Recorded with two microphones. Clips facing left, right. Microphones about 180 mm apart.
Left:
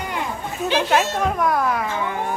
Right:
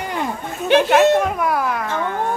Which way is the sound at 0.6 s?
60° right (ahead or behind).